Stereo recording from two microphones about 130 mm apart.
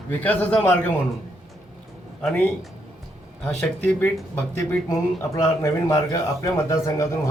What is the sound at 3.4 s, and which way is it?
A man's voice, 15° left (ahead or behind).